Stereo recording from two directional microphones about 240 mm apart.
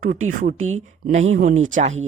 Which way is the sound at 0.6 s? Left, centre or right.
Right.